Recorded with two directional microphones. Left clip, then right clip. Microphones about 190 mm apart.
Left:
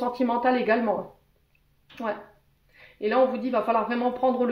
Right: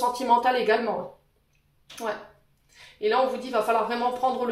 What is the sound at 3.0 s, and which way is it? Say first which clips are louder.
Speech: left 1 dB; 50° left (ahead or behind).